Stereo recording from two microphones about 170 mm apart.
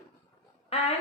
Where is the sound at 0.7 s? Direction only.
35° left (ahead or behind).